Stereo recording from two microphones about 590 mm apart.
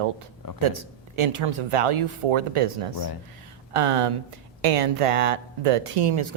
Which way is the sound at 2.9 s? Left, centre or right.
Left.